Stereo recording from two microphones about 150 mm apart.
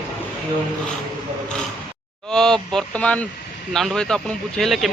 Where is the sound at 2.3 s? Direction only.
5° left (ahead or behind).